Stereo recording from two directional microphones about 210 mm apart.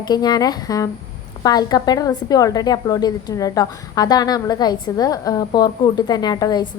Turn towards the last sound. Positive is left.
turn(degrees=20)  # may be behind; listen again after turning